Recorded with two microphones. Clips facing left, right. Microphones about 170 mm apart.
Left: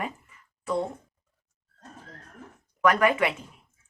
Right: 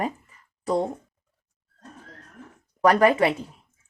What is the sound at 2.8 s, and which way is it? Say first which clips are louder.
Speech: right 4 dB; 35° right (ahead or behind).